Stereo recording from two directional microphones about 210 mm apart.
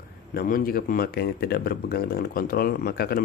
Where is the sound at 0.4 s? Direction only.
45° left (ahead or behind).